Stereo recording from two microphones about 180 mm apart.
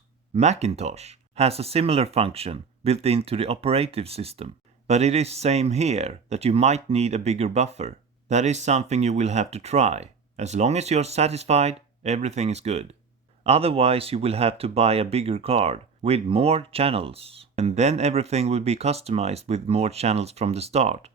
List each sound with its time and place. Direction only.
0.3 s speech: 40° right (ahead or behind)